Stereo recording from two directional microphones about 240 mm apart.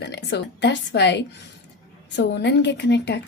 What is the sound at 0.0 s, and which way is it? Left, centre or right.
Speech, left.